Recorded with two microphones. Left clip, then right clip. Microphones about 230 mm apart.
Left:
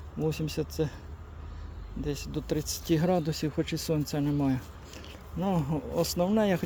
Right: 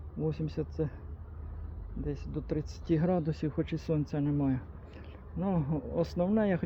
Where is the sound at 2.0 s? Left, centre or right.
Left.